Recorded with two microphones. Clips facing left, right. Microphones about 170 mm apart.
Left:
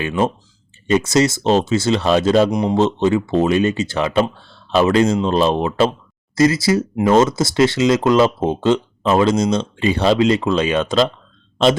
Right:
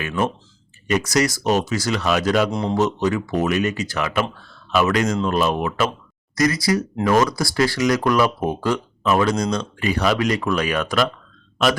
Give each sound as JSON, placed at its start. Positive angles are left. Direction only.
{"t": 0.9, "sound": "speech", "side_deg": 25}
{"t": 2.5, "sound": "speech", "side_deg": 15}